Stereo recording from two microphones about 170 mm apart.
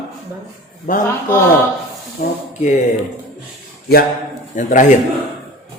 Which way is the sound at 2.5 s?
45° left (ahead or behind).